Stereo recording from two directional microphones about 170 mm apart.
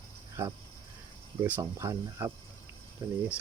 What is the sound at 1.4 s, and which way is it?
Speech, 15° right (ahead or behind).